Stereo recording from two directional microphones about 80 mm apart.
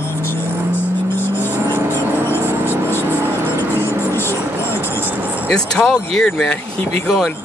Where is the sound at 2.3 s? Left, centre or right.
Left.